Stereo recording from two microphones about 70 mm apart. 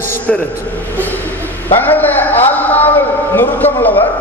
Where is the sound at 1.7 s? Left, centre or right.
Left.